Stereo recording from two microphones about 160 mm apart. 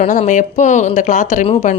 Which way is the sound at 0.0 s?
45° left (ahead or behind).